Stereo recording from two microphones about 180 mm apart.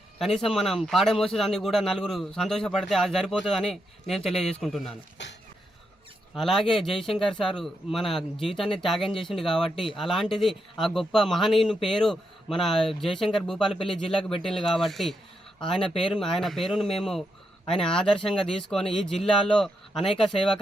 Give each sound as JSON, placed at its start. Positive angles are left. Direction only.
{"t": 0.2, "sound": "a man's voice", "side_deg": 0}
{"t": 5.2, "sound": "speech", "side_deg": 75}
{"t": 6.3, "sound": "a man's voice", "side_deg": 0}